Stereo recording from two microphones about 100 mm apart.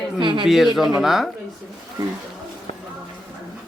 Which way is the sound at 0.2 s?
55° right (ahead or behind).